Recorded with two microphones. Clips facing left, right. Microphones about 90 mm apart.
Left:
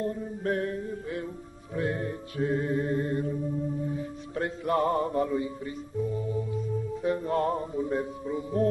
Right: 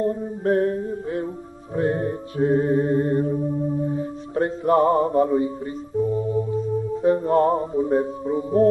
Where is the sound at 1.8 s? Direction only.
35° right (ahead or behind).